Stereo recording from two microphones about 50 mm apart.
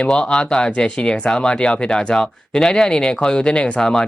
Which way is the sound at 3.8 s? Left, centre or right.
Centre.